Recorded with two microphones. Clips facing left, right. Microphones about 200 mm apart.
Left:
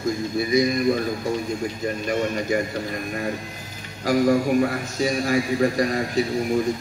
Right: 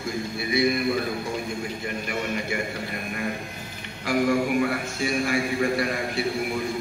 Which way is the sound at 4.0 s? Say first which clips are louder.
Left 4 dB; 40° left (ahead or behind).